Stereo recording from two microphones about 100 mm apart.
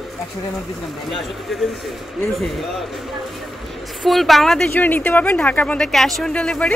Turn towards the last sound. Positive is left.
turn(degrees=10)  # may be behind; listen again after turning